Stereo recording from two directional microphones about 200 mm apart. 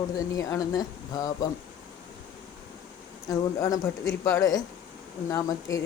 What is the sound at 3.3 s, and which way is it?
Speech, 15° left (ahead or behind).